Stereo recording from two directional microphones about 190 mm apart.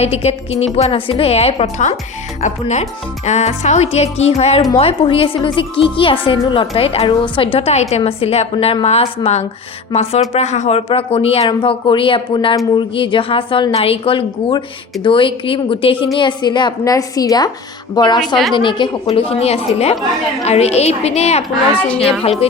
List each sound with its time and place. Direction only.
0.0 s a woman's voice: 35° left (ahead or behind)
21.8 s a woman's voice: 5° left (ahead or behind)
22.2 s a woman's voice: 30° left (ahead or behind)